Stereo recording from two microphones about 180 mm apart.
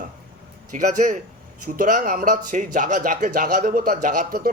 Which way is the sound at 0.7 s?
45° right (ahead or behind).